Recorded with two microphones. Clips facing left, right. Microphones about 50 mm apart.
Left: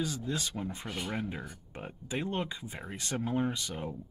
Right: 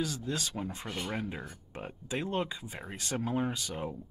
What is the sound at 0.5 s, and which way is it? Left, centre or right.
Speech, centre.